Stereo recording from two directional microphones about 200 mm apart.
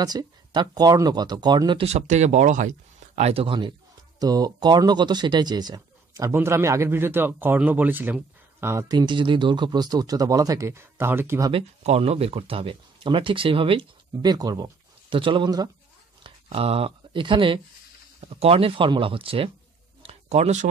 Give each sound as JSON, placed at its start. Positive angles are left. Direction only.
{"t": 0.0, "sound": "speech", "side_deg": -20}
{"t": 11.5, "sound": "speech", "side_deg": -30}
{"t": 20.1, "sound": "a sound", "side_deg": -35}